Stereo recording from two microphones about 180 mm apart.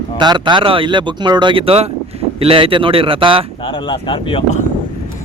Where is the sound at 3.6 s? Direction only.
25° left (ahead or behind).